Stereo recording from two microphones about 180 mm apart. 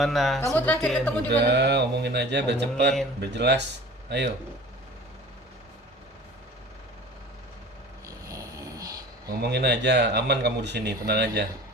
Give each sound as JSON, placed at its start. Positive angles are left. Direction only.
{"t": 0.0, "sound": "speech", "side_deg": 0}
{"t": 1.3, "sound": "speech", "side_deg": -70}
{"t": 8.0, "sound": "snoring", "side_deg": -20}
{"t": 9.4, "sound": "speech", "side_deg": -70}